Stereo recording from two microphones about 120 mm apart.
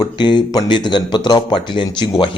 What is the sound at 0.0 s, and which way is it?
A man's voice, 40° left (ahead or behind).